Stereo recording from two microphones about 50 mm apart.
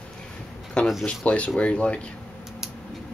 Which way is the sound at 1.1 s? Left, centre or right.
Left.